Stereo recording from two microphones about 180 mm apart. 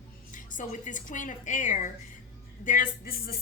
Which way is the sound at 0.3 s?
45° left (ahead or behind).